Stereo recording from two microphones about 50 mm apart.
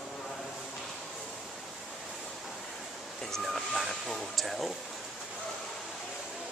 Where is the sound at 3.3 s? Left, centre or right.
Centre.